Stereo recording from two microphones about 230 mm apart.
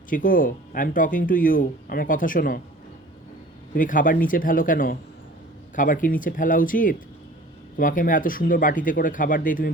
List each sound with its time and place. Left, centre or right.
0.1 s speech: left
3.8 s speech: left